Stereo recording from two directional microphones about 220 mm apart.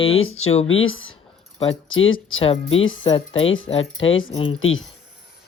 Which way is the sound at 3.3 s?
60° left (ahead or behind).